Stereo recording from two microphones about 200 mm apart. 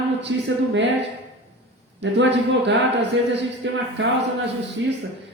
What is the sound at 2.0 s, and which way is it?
A man's voice, 60° right (ahead or behind).